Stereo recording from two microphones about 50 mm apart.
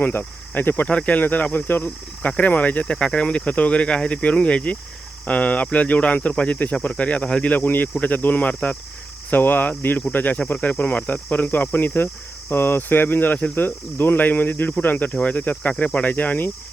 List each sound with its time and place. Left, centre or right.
0.0 s speech: left
0.9 s speech: left
2.8 s speech: left
7.4 s speech: left
12.5 s speech: left